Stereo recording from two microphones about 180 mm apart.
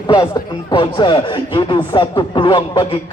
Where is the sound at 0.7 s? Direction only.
25° left (ahead or behind).